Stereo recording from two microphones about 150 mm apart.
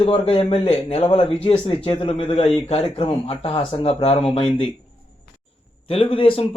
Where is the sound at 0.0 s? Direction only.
40° left (ahead or behind).